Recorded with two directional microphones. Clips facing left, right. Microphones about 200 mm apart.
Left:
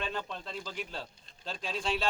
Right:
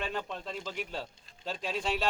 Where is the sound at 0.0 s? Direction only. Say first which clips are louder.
Right 1 dB; 10° right (ahead or behind).